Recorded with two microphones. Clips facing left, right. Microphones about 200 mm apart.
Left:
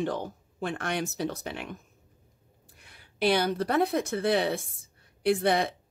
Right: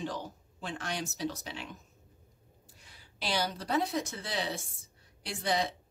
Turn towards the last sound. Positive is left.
turn(degrees=55)  # may be behind; listen again after turning